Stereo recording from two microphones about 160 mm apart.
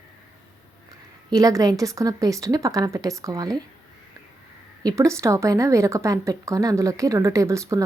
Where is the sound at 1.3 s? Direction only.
20° right (ahead or behind).